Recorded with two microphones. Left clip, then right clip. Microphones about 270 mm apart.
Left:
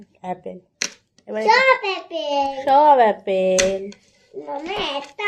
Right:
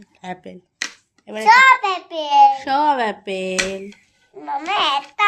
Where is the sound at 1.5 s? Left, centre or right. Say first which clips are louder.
Right 5 dB; right.